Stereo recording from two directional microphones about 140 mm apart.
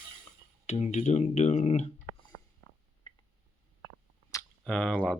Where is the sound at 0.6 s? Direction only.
55° left (ahead or behind).